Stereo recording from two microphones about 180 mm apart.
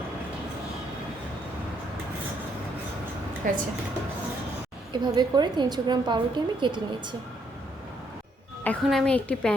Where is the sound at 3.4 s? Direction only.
50° right (ahead or behind).